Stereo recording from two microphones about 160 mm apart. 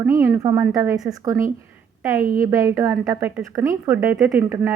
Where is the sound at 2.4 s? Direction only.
20° right (ahead or behind).